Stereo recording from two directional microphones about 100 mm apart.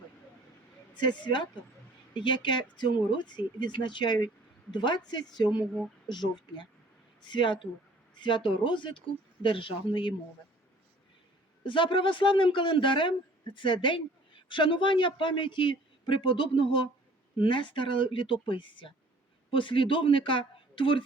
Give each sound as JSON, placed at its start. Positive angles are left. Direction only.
{"t": 0.9, "sound": "speech", "side_deg": 50}
{"t": 11.6, "sound": "speech", "side_deg": 60}